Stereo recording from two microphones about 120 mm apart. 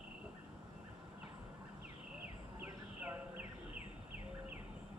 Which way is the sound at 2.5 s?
15° right (ahead or behind).